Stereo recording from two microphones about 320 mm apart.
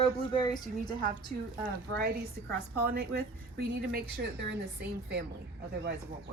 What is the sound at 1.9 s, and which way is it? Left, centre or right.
A woman's voice, right.